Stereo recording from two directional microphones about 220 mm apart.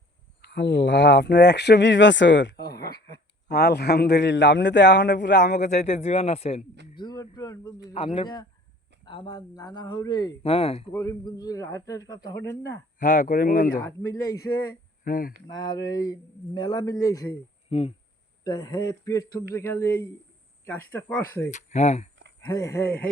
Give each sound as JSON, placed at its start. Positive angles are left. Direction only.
{"t": 0.4, "sound": "speech", "side_deg": 50}
{"t": 5.5, "sound": "speech", "side_deg": 35}
{"t": 10.9, "sound": "a man's voice", "side_deg": 15}
{"t": 13.0, "sound": "speech", "side_deg": 35}
{"t": 13.8, "sound": "a man's voice", "side_deg": 10}
{"t": 15.0, "sound": "speech", "side_deg": 40}
{"t": 15.4, "sound": "a man's voice", "side_deg": 20}
{"t": 17.7, "sound": "a man's voice", "side_deg": 25}
{"t": 21.5, "sound": "speech", "side_deg": 30}
{"t": 22.4, "sound": "a man's voice", "side_deg": 15}